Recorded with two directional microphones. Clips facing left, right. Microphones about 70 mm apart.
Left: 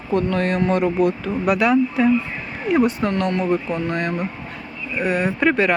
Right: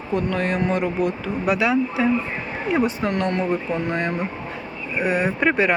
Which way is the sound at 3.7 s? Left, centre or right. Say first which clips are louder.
Left 1 dB; right.